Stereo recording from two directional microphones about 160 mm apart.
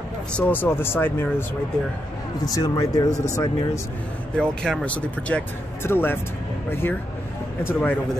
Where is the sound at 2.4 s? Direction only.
20° left (ahead or behind).